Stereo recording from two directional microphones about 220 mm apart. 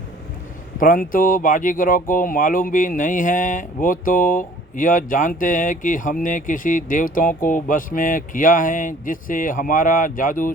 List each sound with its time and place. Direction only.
0.8 s speech: 40° left (ahead or behind)